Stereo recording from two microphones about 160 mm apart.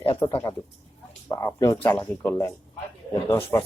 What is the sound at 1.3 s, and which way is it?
Speech, 20° left (ahead or behind).